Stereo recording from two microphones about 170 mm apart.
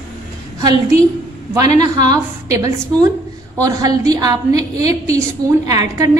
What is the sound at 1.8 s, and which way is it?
A woman's voice, 25° right (ahead or behind).